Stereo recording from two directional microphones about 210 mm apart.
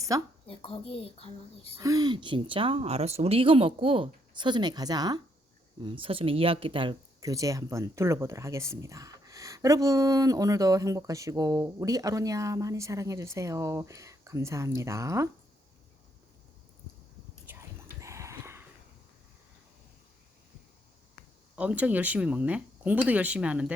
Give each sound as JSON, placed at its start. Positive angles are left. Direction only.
{"t": 0.1, "sound": "speech", "side_deg": -15}
{"t": 0.4, "sound": "a woman's voice", "side_deg": 25}
{"t": 1.8, "sound": "speech", "side_deg": -15}
{"t": 17.5, "sound": "whispering", "side_deg": -10}
{"t": 18.0, "sound": "a sound", "side_deg": -15}
{"t": 21.5, "sound": "speech", "side_deg": -5}